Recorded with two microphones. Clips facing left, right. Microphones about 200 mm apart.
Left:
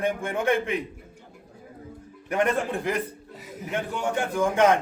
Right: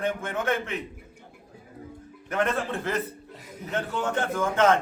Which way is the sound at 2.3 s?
15° left (ahead or behind).